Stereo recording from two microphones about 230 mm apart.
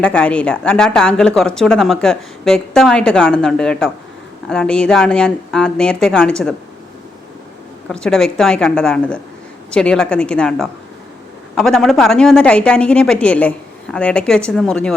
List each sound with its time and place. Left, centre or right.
0.0 s speech: centre
7.9 s speech: centre